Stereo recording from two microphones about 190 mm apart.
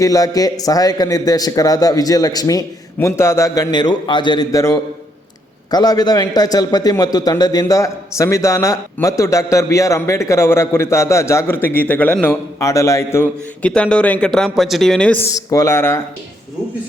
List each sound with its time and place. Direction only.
0.0 s a man's voice: 20° left (ahead or behind)